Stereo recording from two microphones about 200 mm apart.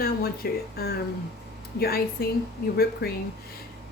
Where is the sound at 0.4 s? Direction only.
50° left (ahead or behind).